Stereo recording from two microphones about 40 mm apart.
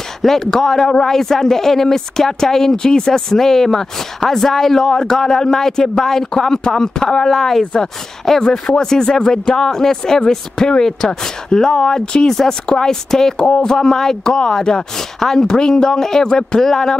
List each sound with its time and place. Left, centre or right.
0.2 s speech: centre